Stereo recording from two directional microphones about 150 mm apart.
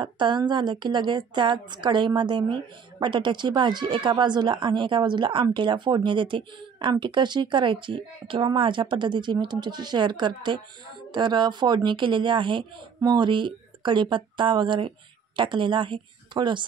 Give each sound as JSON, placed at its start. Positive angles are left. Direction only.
{"t": 0.0, "sound": "a woman's voice", "side_deg": -30}